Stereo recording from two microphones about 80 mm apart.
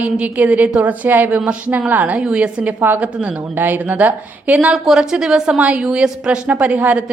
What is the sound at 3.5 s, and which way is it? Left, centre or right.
A woman's voice, right.